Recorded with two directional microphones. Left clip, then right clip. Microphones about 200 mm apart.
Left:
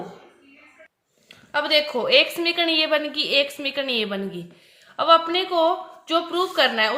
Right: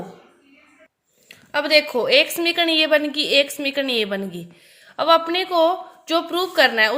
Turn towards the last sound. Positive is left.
turn(degrees=-35)  # may be behind; listen again after turning